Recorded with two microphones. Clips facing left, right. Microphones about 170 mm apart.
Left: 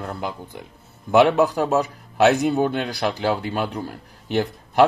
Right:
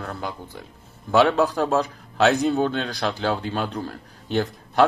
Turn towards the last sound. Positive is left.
turn(degrees=15)  # may be behind; listen again after turning